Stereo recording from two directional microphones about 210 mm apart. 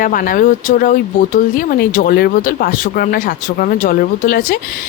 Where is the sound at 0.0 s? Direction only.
40° left (ahead or behind).